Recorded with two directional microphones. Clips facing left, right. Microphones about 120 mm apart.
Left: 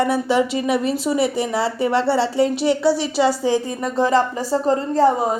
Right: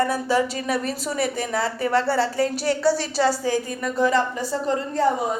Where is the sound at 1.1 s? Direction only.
25° left (ahead or behind).